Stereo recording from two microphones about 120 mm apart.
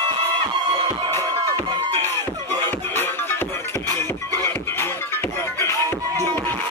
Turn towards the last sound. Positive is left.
turn(degrees=20)  # may be behind; listen again after turning